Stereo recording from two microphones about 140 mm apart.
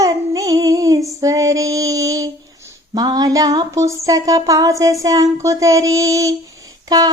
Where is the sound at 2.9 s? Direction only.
25° right (ahead or behind).